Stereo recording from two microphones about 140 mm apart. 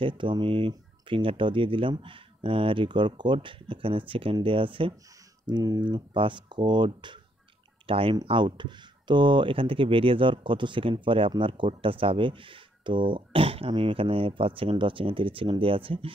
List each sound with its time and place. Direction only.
0.0 s speech: 35° right (ahead or behind)